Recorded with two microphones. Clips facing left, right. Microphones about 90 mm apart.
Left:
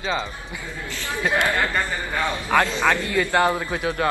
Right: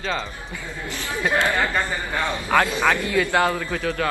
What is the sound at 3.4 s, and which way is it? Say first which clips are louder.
Speech: left 1 dB; 20° left (ahead or behind).